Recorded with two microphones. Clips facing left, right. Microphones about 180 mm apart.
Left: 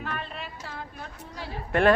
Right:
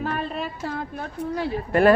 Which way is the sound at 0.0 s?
40° right (ahead or behind).